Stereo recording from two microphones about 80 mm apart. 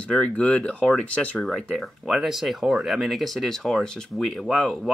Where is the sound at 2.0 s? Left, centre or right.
Centre.